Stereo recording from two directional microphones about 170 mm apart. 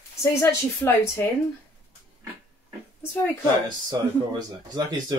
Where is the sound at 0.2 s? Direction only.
15° left (ahead or behind).